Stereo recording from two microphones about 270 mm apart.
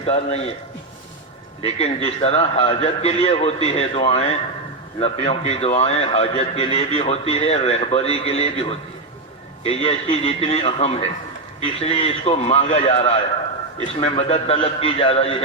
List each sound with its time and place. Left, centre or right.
0.0 s a man's voice: left
1.6 s a man's voice: left
9.6 s a man's voice: left